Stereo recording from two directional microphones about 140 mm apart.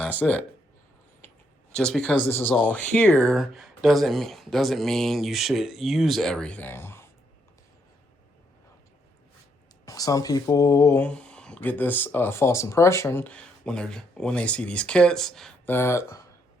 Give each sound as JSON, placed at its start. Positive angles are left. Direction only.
{"t": 0.0, "sound": "speech", "side_deg": 10}
{"t": 1.7, "sound": "speech", "side_deg": 5}
{"t": 9.8, "sound": "speech", "side_deg": 25}
{"t": 11.0, "sound": "speech", "side_deg": 10}
{"t": 15.6, "sound": "speech", "side_deg": 15}